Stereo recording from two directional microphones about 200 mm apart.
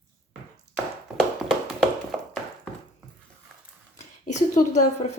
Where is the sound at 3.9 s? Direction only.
35° left (ahead or behind).